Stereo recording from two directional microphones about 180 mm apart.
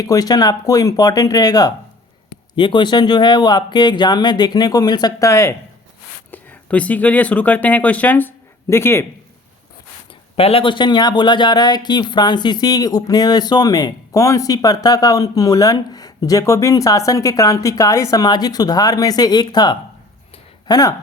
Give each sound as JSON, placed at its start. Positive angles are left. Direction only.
{"t": 0.0, "sound": "speech", "side_deg": 20}
{"t": 10.3, "sound": "speech", "side_deg": 35}